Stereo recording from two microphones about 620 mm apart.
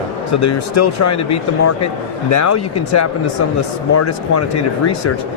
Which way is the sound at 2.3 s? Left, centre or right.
Left.